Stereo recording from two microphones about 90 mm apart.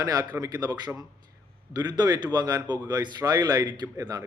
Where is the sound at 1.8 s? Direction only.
50° right (ahead or behind).